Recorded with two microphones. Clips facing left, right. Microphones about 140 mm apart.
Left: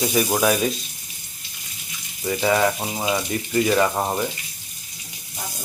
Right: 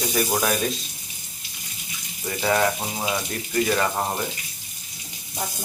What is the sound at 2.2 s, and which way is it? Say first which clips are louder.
Speech: left 2 dB; 5° left (ahead or behind).